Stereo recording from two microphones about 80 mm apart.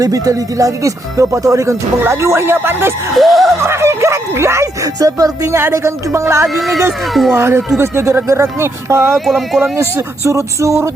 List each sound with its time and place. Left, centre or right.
0.0 s speech: right
3.2 s speech: centre
3.6 s speech: right
6.5 s speech: centre
7.3 s speech: right
9.1 s speech: centre
9.9 s speech: right